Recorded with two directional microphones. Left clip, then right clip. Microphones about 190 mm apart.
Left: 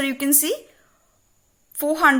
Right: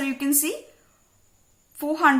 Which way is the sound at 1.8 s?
40° left (ahead or behind).